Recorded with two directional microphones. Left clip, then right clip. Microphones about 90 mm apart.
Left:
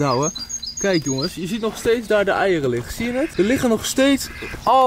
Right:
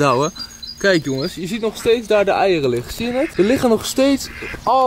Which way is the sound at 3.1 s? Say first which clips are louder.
Right 3 dB; 45° left (ahead or behind).